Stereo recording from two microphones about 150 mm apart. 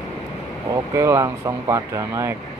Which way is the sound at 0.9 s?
20° right (ahead or behind).